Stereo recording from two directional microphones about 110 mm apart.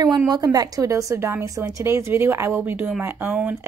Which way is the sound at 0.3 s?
35° right (ahead or behind).